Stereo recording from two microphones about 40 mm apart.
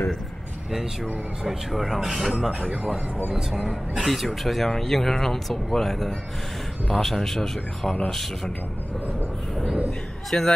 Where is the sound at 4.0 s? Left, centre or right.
Centre.